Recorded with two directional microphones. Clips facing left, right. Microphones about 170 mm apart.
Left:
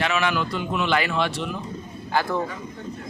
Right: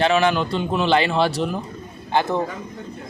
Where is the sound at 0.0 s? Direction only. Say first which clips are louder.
Right 6 dB; 30° right (ahead or behind).